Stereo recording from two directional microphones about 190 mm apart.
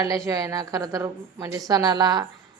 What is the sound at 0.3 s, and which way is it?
A woman's voice, 20° right (ahead or behind).